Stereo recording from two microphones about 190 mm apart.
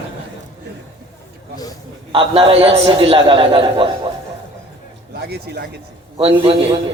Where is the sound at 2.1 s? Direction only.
30° right (ahead or behind).